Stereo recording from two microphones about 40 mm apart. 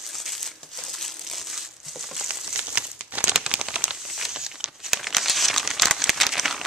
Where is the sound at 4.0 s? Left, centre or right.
Centre.